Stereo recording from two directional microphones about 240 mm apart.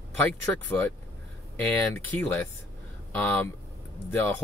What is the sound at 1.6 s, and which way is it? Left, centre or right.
Speech, centre.